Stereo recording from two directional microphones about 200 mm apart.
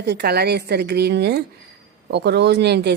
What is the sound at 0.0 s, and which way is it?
Speech, 55° right (ahead or behind).